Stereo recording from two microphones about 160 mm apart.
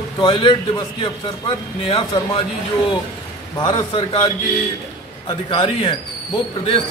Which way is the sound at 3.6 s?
30° left (ahead or behind).